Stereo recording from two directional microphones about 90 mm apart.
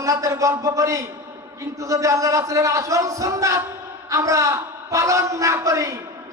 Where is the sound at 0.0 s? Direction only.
35° right (ahead or behind).